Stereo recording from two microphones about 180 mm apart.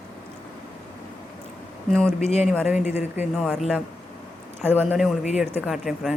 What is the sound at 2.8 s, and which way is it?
Speech, 40° left (ahead or behind).